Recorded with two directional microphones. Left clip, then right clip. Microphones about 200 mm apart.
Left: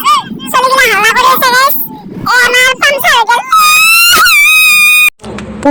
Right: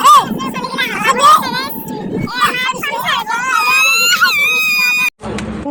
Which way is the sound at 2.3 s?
45° left (ahead or behind).